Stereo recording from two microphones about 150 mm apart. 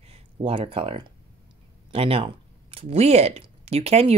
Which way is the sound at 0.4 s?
35° right (ahead or behind).